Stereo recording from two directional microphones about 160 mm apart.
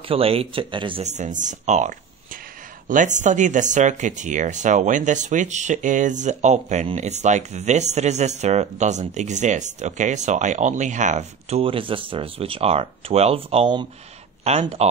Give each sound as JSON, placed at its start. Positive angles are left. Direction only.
{"t": 0.1, "sound": "speech", "side_deg": -35}
{"t": 1.0, "sound": "speech", "side_deg": -50}